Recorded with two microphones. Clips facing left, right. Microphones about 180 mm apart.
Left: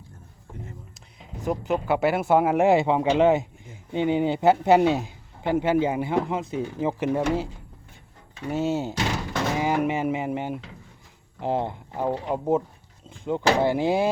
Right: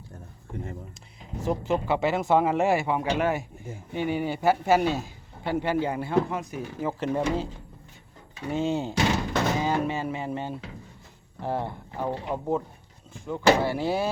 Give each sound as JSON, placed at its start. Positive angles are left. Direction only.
{"t": 1.5, "sound": "a man's voice", "side_deg": 5}
{"t": 7.0, "sound": "speech", "side_deg": 10}
{"t": 8.5, "sound": "a man's voice", "side_deg": 5}